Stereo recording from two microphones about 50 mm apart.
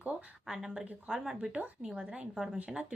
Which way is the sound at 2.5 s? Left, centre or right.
Right.